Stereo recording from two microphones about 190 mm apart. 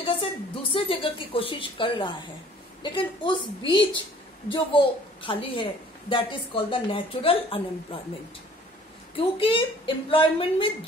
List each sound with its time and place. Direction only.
0.0 s a woman's voice: 30° left (ahead or behind)
9.1 s a woman's voice: 25° left (ahead or behind)